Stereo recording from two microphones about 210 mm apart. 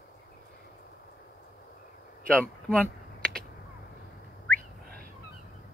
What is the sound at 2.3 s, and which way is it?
Typing, 5° left (ahead or behind).